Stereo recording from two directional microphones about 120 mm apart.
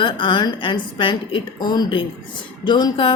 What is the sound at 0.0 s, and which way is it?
A woman's voice, 40° left (ahead or behind).